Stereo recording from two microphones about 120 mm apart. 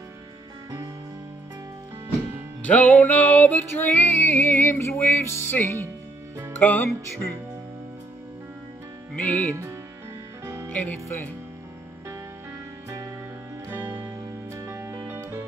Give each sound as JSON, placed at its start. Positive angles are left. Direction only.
{"t": 2.6, "sound": "music", "side_deg": 10}
{"t": 9.1, "sound": "music", "side_deg": 15}
{"t": 10.4, "sound": "music", "side_deg": -25}
{"t": 10.7, "sound": "music", "side_deg": 15}
{"t": 13.7, "sound": "music", "side_deg": -20}